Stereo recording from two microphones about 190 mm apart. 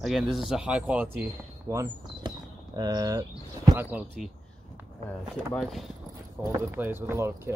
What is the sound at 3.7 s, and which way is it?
Speech, 10° right (ahead or behind).